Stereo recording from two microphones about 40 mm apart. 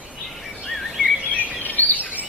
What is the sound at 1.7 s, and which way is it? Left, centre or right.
Bird vocalization, left.